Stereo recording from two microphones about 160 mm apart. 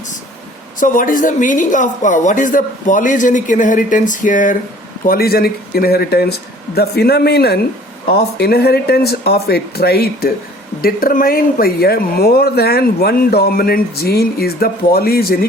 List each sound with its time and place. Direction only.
0.8 s a woman's voice: 55° left (ahead or behind)
5.0 s speech: 70° left (ahead or behind)